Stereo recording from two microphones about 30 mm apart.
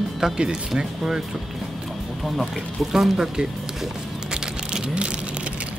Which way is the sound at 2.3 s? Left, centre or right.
Centre.